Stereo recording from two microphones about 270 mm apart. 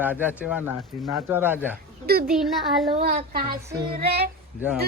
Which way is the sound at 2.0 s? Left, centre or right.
Right.